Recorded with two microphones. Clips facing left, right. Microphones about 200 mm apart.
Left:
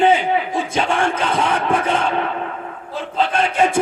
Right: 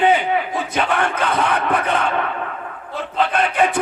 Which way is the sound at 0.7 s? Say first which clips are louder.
Even; 25° left (ahead or behind).